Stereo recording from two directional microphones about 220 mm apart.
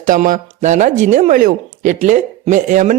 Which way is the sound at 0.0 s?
35° right (ahead or behind).